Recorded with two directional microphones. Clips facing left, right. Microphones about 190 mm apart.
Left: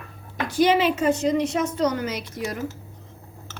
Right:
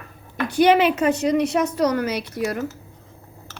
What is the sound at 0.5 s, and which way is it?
A woman's voice, 65° right (ahead or behind).